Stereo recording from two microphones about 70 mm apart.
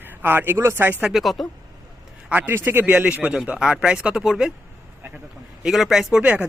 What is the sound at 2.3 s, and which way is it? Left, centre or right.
Speech, right.